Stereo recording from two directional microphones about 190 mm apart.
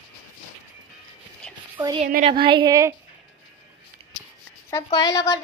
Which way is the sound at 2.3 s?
25° right (ahead or behind).